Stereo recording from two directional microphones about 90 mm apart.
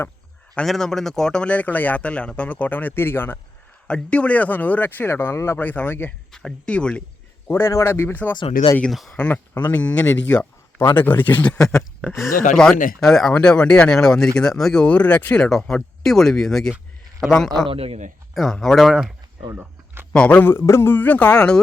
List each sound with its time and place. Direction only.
0.5 s speech: 5° left (ahead or behind); by 3.3 s 25° left (ahead or behind)
3.8 s speech: 10° left (ahead or behind); by 5.5 s 30° left (ahead or behind)
5.5 s speech: 20° left (ahead or behind)
6.3 s speech: 10° left (ahead or behind)
7.4 s speech: 30° left (ahead or behind)
8.4 s speech: 60° left (ahead or behind)
8.9 s speech: centre (ahead or behind)
9.1 s speech: 15° left (ahead or behind)
15.4 s speech: 5° left (ahead or behind)
18.5 s speech: centre (ahead or behind)
19.5 s a sound: 25° right (ahead or behind)
20.1 s speech: 15° left (ahead or behind)